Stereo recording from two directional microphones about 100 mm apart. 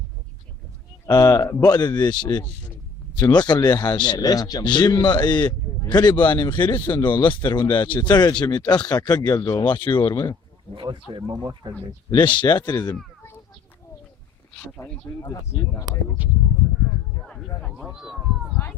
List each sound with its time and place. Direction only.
1.0 s a man's voice: 30° left (ahead or behind); by 10.3 s 50° left (ahead or behind)
10.8 s speech: 60° right (ahead or behind)
11.1 s speech: 45° right (ahead or behind)
12.1 s speech: 55° left (ahead or behind)
15.2 s a man's voice: 35° left (ahead or behind)
16.2 s speech: 15° right (ahead or behind)
17.6 s speech: 5° left (ahead or behind)
17.9 s speech: 5° right (ahead or behind)